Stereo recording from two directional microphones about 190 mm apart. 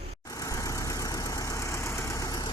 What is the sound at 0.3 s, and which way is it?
Vehicle, 15° left (ahead or behind).